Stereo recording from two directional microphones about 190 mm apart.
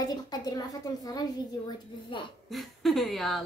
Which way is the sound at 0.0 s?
20° left (ahead or behind).